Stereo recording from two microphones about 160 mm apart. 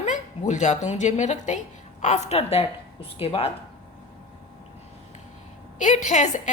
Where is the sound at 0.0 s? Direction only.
45° left (ahead or behind).